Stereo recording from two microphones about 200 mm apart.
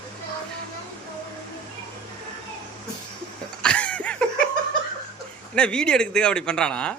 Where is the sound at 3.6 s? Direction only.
5° left (ahead or behind).